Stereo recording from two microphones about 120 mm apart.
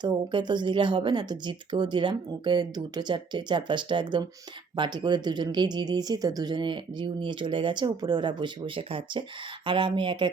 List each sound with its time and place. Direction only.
0.0 s speech: 40° right (ahead or behind)